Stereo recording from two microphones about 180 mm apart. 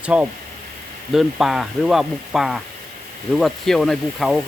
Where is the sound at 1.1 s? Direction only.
Centre (ahead or behind).